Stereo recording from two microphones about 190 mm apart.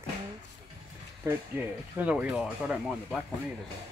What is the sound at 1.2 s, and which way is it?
Speech, 10° right (ahead or behind).